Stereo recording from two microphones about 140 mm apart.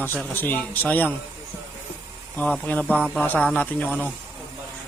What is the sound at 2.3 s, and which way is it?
A man's voice, 10° left (ahead or behind).